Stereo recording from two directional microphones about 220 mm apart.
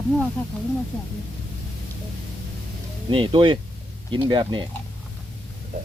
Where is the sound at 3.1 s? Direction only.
25° right (ahead or behind).